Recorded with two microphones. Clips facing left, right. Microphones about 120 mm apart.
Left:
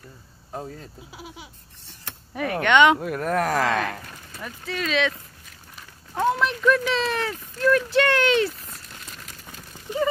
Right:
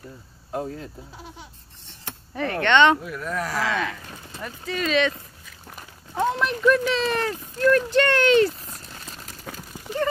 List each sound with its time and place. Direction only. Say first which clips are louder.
1.1 s speech: left 1 dB; 5° left (ahead or behind)
3.0 s speech: left 5 dB; 50° left (ahead or behind)
4.4 s speech: right 2 dB; centre (ahead or behind)
6.1 s speech: left 1 dB; centre (ahead or behind)
8.6 s crumpling: right 2 dB; 35° right (ahead or behind)